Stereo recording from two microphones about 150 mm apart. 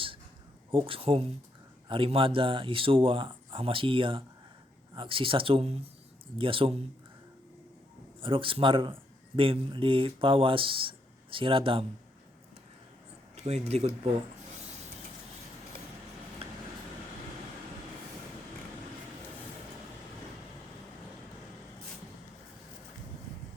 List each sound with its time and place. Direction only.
0.7 s speech: 35° right (ahead or behind)
8.2 s speech: 35° right (ahead or behind)
13.3 s speech: 45° right (ahead or behind)
16.4 s a sound: 40° right (ahead or behind)